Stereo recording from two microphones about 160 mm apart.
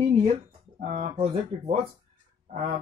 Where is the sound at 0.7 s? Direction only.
60° right (ahead or behind).